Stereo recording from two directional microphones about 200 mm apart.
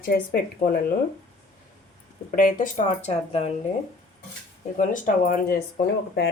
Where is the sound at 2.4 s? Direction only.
40° left (ahead or behind).